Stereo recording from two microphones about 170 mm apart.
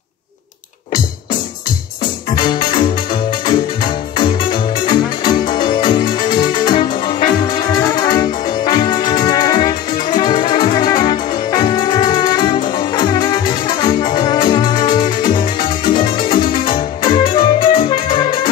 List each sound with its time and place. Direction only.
4.2 s music: 30° left (ahead or behind)
6.0 s music: 50° left (ahead or behind)
6.6 s music: 25° left (ahead or behind)
7.4 s brass instrument: 25° left (ahead or behind)
11.5 s music: 25° left (ahead or behind)